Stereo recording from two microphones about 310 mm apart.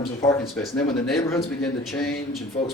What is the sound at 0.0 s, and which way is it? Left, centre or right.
Speech, centre.